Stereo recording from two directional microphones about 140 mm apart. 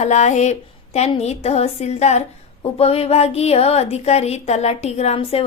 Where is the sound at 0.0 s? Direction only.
55° left (ahead or behind).